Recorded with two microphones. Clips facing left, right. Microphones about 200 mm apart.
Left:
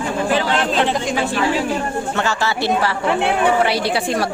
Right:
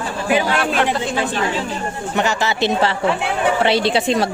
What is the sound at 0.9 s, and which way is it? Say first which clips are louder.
Speech: left 1 dB; 10° left (ahead or behind).